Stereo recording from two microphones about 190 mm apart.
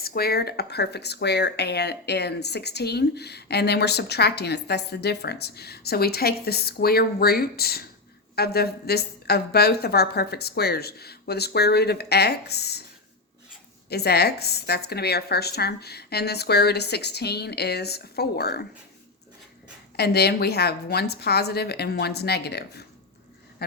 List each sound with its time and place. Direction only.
0.0 s speech: 55° left (ahead or behind)
13.9 s speech: 55° left (ahead or behind)
20.0 s speech: 55° left (ahead or behind)